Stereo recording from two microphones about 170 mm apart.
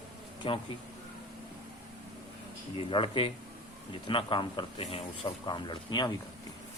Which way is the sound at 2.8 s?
30° left (ahead or behind).